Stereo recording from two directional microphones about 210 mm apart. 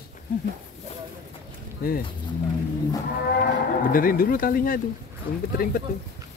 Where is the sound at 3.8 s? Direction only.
40° left (ahead or behind).